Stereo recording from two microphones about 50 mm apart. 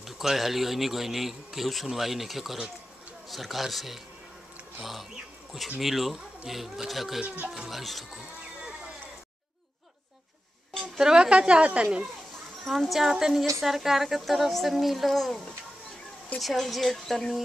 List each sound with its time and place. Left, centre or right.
0.0 s speech: centre
10.8 s a woman's voice: centre
12.6 s speech: centre